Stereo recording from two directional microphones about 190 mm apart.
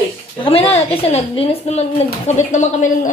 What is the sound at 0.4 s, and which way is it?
A woman's voice, 30° left (ahead or behind).